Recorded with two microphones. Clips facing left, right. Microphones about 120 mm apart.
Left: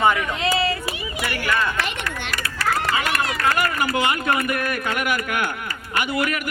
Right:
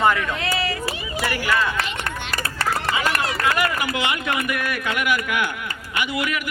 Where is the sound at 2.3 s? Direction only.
30° right (ahead or behind).